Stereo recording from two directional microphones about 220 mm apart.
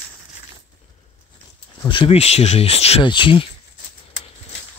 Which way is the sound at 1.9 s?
25° left (ahead or behind).